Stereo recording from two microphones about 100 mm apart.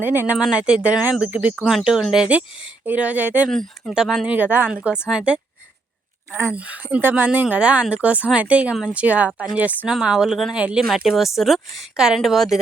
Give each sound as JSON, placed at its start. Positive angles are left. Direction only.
{"t": 0.0, "sound": "speech", "side_deg": -20}
{"t": 0.3, "sound": "speech", "side_deg": -10}
{"t": 1.6, "sound": "speech", "side_deg": -5}
{"t": 3.5, "sound": "speech", "side_deg": 5}
{"t": 4.4, "sound": "speech", "side_deg": -20}
{"t": 6.5, "sound": "speech", "side_deg": -15}